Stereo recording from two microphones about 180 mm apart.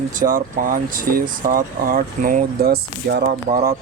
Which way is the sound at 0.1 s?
50° right (ahead or behind).